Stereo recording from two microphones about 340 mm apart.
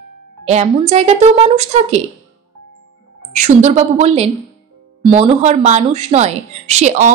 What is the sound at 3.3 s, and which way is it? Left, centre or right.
A woman's voice, right.